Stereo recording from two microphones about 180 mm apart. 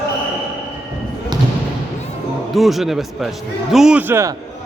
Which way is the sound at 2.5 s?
Centre (ahead or behind).